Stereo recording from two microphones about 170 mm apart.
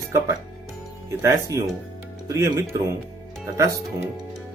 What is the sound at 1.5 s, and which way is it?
Speech, 20° right (ahead or behind).